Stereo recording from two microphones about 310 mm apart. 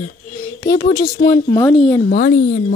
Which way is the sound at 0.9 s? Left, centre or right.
Left.